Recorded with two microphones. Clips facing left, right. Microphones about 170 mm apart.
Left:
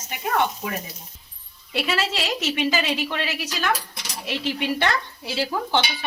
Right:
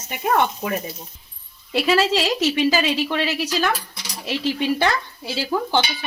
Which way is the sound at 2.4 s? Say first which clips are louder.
Right 2 dB; 35° right (ahead or behind).